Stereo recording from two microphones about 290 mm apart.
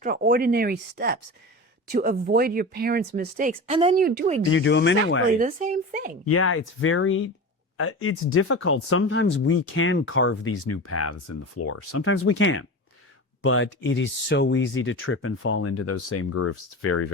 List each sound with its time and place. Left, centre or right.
0.0 s speech: right
3.7 s speech: right
4.5 s speech: left
5.4 s speech: right
6.2 s speech: left